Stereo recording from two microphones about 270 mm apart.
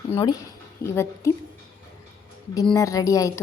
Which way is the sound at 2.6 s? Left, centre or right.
Centre.